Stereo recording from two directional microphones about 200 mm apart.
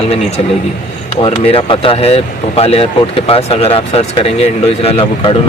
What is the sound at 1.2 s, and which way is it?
Speech, 30° left (ahead or behind).